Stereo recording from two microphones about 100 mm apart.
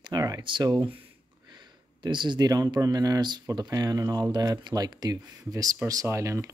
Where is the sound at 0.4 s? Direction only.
50° right (ahead or behind).